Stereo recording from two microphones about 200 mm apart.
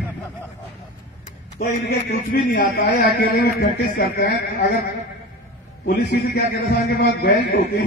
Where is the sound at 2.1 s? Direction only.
45° left (ahead or behind).